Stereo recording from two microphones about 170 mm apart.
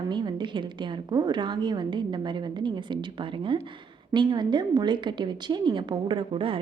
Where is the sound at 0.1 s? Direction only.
25° right (ahead or behind).